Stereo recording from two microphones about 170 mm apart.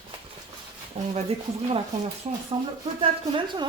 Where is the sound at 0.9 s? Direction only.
35° right (ahead or behind).